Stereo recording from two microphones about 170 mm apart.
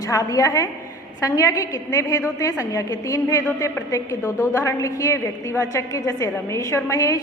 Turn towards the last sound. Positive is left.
turn(degrees=20)  # may be behind; listen again after turning